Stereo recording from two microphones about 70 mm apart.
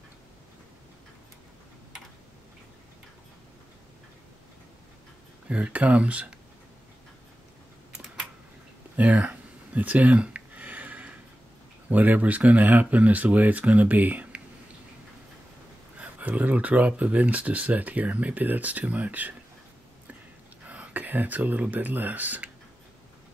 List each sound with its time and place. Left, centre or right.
5.5 s speech: centre
7.9 s a sound: centre
11.9 s speech: right
16.0 s speech: right
20.6 s speech: right